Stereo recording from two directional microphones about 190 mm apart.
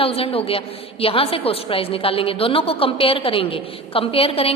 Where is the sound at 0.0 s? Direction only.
30° left (ahead or behind).